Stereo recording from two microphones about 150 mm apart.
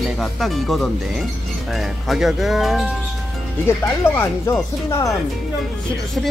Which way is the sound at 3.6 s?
15° left (ahead or behind).